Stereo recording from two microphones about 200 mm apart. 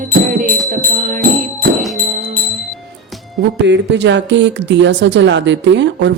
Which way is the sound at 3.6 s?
60° right (ahead or behind).